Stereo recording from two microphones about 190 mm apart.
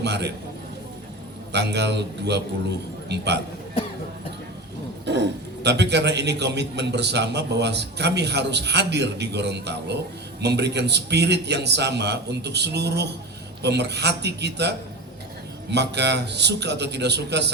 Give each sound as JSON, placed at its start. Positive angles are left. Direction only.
{"t": 0.0, "sound": "a man's voice", "side_deg": -60}
{"t": 1.5, "sound": "a man's voice", "side_deg": -60}
{"t": 5.0, "sound": "a man's voice", "side_deg": -65}